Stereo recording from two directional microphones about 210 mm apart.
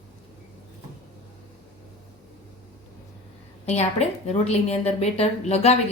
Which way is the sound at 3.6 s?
30° left (ahead or behind).